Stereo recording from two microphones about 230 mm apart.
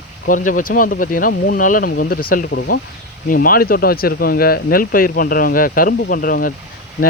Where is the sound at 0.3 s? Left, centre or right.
Left.